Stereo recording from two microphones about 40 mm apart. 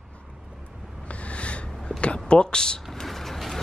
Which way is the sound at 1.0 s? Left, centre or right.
Left.